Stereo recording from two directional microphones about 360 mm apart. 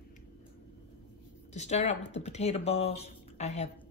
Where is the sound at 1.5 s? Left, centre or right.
Centre.